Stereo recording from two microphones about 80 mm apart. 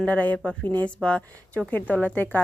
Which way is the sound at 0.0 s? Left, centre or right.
Centre.